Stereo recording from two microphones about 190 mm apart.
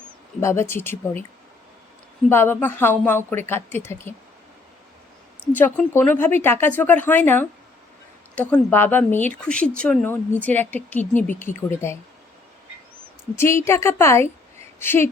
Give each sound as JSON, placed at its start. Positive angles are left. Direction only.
{"t": 0.3, "sound": "speech", "side_deg": 15}
{"t": 2.3, "sound": "speech", "side_deg": 10}
{"t": 5.5, "sound": "speech", "side_deg": 10}
{"t": 13.3, "sound": "speech", "side_deg": 15}